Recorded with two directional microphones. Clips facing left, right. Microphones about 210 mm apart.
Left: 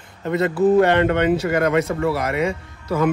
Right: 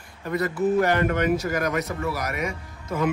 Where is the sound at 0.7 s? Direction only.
70° left (ahead or behind).